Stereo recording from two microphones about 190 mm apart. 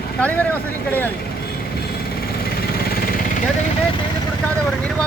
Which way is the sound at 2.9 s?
50° left (ahead or behind).